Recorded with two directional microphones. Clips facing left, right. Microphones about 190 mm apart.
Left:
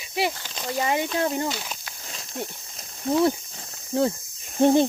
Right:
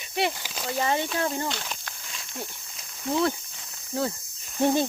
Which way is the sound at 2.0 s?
40° left (ahead or behind).